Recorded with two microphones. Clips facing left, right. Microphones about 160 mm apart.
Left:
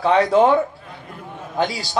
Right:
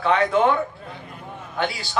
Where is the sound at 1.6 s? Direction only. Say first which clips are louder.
Left 4 dB; 40° left (ahead or behind).